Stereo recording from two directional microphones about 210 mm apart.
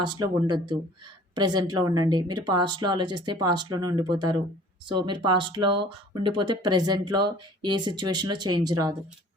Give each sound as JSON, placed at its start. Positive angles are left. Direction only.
{"t": 0.0, "sound": "a woman's voice", "side_deg": -20}